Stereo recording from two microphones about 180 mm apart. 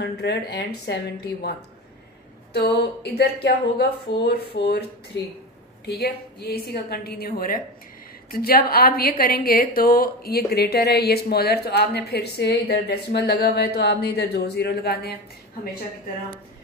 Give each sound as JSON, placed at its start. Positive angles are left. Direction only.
{"t": 0.0, "sound": "speech", "side_deg": 65}
{"t": 2.5, "sound": "a woman's voice", "side_deg": 65}